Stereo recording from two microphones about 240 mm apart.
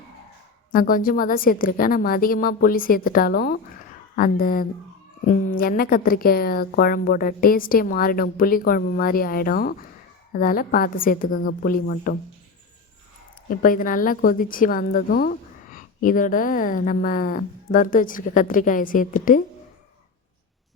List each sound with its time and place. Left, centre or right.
0.7 s a woman's voice: left
13.5 s a woman's voice: left